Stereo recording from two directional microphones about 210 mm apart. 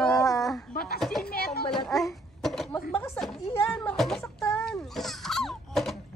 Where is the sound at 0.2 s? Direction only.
15° left (ahead or behind).